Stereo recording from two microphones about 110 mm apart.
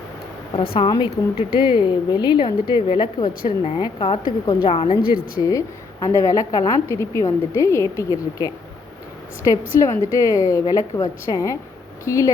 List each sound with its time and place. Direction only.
0.5 s a woman's voice: 50° left (ahead or behind)
4.7 s a woman's voice: 60° left (ahead or behind)
5.4 s a woman's voice: 30° left (ahead or behind)